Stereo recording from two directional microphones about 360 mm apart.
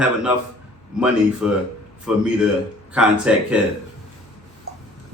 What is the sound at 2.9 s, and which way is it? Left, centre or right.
Speech, centre.